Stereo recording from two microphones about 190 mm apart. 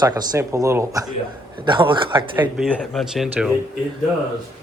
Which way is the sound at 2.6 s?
Centre (ahead or behind).